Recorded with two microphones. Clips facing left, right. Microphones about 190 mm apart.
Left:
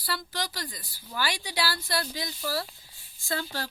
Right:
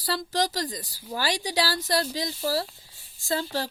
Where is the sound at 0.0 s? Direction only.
40° right (ahead or behind).